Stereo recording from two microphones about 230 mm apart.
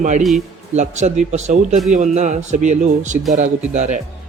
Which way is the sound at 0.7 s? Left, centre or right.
Right.